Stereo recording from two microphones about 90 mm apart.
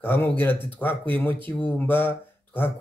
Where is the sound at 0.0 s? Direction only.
25° left (ahead or behind).